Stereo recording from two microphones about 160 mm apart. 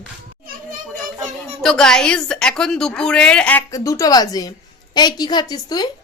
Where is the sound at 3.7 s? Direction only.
20° left (ahead or behind).